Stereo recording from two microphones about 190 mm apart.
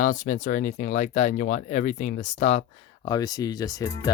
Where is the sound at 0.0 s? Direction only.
45° left (ahead or behind).